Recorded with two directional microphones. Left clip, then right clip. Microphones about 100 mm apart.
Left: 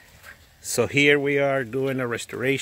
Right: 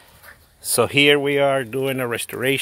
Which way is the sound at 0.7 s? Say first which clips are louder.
Right 4 dB; 15° right (ahead or behind).